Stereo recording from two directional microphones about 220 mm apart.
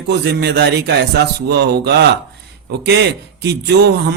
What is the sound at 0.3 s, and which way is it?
Speech, 50° right (ahead or behind).